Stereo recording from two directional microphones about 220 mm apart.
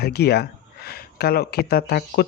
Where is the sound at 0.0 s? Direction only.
45° left (ahead or behind).